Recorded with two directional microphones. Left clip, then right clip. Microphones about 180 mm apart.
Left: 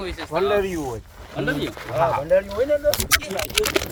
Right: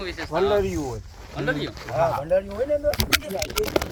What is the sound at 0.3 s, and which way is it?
Speech, 25° left (ahead or behind).